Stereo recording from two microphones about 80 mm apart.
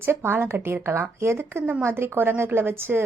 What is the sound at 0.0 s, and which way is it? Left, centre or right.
A woman's voice, right.